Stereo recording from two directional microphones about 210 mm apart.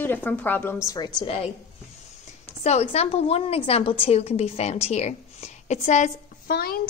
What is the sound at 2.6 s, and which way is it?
A woman's voice, 30° left (ahead or behind).